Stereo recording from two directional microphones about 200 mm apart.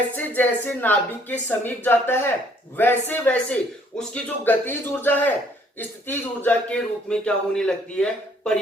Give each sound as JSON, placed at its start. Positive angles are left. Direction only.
{"t": 0.1, "sound": "a man's voice", "side_deg": 10}